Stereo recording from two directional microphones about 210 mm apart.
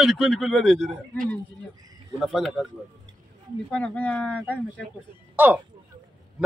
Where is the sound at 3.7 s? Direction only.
5° left (ahead or behind).